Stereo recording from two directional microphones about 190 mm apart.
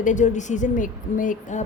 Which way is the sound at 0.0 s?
40° left (ahead or behind).